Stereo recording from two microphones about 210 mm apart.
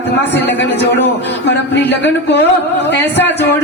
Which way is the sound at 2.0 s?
55° left (ahead or behind).